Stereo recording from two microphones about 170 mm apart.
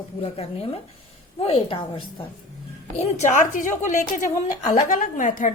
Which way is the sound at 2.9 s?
40° left (ahead or behind).